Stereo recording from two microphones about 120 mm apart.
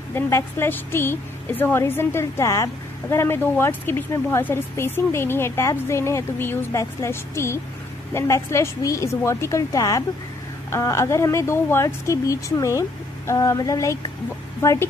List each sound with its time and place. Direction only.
0.1 s a woman's voice: 20° left (ahead or behind)